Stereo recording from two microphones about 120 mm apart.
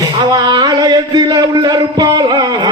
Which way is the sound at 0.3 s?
35° right (ahead or behind).